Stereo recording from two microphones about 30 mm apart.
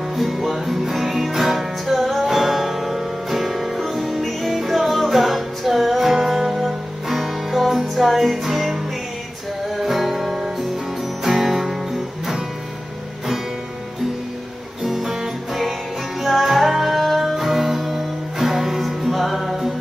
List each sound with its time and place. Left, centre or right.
0.2 s music: centre
9.8 s music: centre
14.8 s music: centre